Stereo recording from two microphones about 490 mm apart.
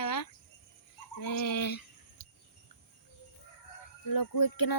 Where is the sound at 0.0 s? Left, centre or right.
Left.